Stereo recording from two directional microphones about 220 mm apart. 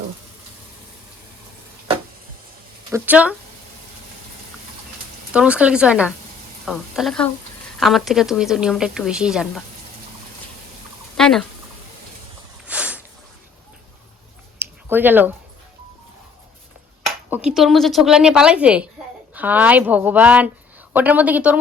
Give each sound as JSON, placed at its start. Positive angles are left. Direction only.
{"t": 2.9, "sound": "speech", "side_deg": -5}
{"t": 5.3, "sound": "a woman's voice", "side_deg": -5}
{"t": 11.2, "sound": "speech", "side_deg": 0}
{"t": 12.6, "sound": "a sound", "side_deg": -5}
{"t": 14.6, "sound": "a sound", "side_deg": -10}
{"t": 17.2, "sound": "a woman's voice", "side_deg": -5}